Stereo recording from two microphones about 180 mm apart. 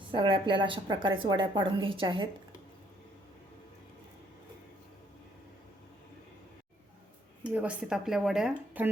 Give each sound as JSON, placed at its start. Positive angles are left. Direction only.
{"t": 0.1, "sound": "speech", "side_deg": -25}
{"t": 7.4, "sound": "speech", "side_deg": -5}